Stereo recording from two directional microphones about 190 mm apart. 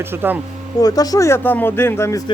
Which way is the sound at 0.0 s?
10° right (ahead or behind).